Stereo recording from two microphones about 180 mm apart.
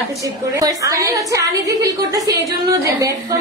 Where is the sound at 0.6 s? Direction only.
20° right (ahead or behind).